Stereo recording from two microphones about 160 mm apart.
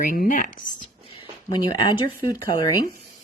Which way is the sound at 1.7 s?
30° left (ahead or behind).